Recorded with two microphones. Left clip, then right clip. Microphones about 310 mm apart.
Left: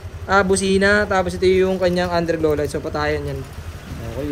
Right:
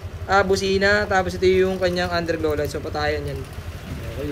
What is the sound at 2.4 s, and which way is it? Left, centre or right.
Speech, left.